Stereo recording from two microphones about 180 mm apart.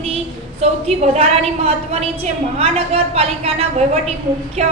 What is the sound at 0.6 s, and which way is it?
A woman's voice, 35° right (ahead or behind).